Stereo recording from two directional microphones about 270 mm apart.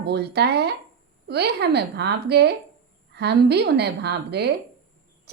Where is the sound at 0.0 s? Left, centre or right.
Right.